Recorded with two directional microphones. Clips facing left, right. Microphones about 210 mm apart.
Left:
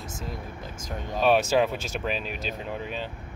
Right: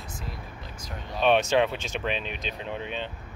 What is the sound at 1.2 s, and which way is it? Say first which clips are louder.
Speech: even; 5° left (ahead or behind).